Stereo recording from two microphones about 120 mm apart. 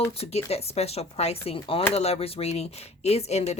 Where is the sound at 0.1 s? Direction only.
60° left (ahead or behind).